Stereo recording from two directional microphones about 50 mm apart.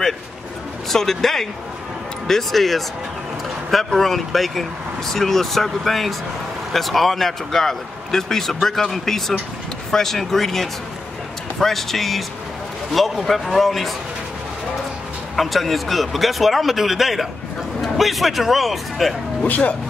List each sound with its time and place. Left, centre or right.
0.8 s a man's voice: centre
15.3 s speech: centre
19.4 s speech: left